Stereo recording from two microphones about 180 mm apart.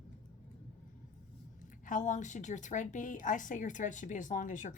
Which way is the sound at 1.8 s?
45° left (ahead or behind).